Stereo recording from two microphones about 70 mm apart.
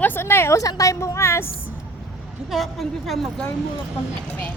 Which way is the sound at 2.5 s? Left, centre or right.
Centre.